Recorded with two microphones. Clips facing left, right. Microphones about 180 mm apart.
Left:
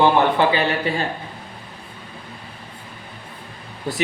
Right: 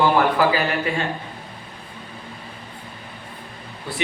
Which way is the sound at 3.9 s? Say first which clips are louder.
Left 5 dB; 40° left (ahead or behind).